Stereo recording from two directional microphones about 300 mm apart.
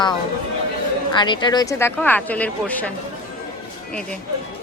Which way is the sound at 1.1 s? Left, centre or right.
Centre.